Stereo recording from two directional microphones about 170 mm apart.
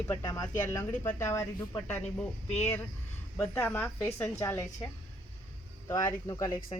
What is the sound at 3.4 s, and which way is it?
A woman's voice, 10° left (ahead or behind).